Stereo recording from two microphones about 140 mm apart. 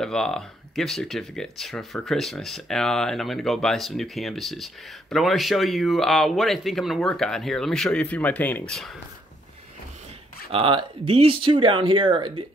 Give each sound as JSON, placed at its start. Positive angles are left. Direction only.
{"t": 0.0, "sound": "speech", "side_deg": 5}
{"t": 10.5, "sound": "speech", "side_deg": -40}